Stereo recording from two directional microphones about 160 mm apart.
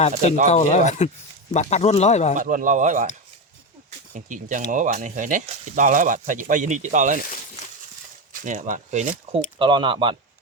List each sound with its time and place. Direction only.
0.4 s speech: 45° left (ahead or behind)
2.3 s speech: 55° right (ahead or behind)
4.1 s speech: 50° right (ahead or behind)
8.3 s speech: 55° right (ahead or behind)
9.3 s speech: 30° right (ahead or behind)